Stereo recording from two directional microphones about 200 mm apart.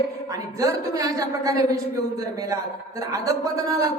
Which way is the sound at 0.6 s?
15° right (ahead or behind).